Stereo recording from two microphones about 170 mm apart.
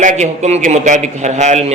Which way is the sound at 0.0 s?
40° right (ahead or behind).